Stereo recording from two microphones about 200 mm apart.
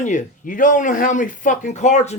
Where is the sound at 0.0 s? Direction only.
40° left (ahead or behind).